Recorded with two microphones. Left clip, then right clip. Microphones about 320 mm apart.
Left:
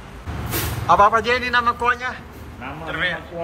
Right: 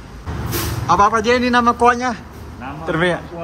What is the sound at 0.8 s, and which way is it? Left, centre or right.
A man's voice, centre.